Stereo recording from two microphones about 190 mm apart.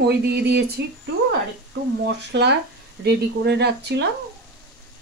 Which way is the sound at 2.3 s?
60° right (ahead or behind).